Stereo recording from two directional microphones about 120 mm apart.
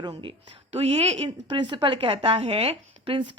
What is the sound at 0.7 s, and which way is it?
Speech, 55° right (ahead or behind).